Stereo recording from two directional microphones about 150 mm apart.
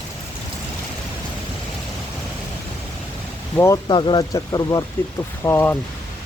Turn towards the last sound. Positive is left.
turn(degrees=15)  # may be behind; listen again after turning